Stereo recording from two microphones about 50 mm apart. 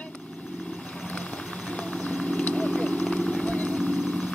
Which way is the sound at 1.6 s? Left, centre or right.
Left.